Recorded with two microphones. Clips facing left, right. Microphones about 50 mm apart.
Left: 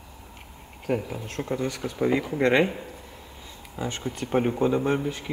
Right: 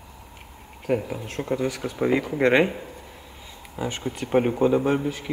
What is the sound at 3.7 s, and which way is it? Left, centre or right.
Speech, centre.